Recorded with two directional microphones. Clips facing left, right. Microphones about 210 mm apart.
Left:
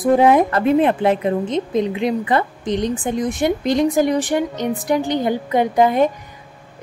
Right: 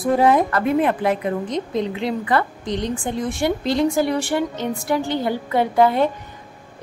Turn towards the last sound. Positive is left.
turn(degrees=15)  # may be behind; listen again after turning